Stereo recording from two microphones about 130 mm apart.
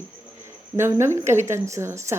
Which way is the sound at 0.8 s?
20° right (ahead or behind).